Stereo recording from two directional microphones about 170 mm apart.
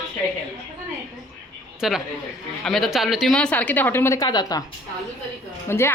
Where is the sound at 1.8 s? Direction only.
Centre (ahead or behind); by 4.6 s 25° left (ahead or behind).